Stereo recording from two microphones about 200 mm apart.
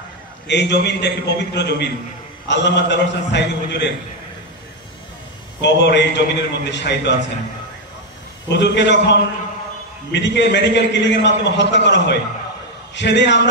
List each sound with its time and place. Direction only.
0.5 s a man's voice: 60° left (ahead or behind)
5.6 s a man's voice: 60° left (ahead or behind)
8.5 s a man's voice: 60° left (ahead or behind)